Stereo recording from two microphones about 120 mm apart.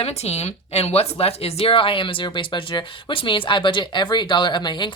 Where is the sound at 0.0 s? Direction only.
60° left (ahead or behind).